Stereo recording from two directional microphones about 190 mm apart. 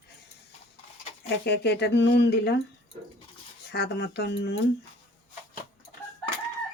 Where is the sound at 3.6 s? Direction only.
60° left (ahead or behind).